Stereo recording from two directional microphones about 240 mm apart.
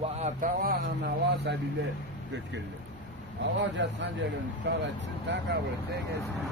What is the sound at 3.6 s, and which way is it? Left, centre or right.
Speech, right.